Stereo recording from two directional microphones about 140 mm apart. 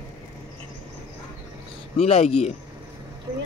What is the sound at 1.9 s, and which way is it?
Speech, 45° left (ahead or behind).